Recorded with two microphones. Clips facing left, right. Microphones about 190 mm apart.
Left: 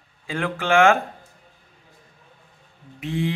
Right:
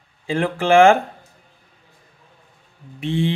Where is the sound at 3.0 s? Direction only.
30° right (ahead or behind).